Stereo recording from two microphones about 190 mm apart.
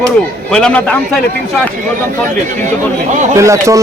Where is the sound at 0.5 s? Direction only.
5° left (ahead or behind).